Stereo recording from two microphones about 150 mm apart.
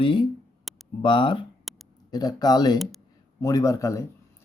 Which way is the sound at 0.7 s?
Centre (ahead or behind).